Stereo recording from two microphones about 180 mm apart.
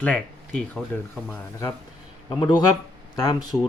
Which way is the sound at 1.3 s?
15° left (ahead or behind).